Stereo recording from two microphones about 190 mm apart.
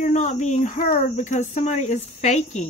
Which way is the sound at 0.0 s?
40° left (ahead or behind).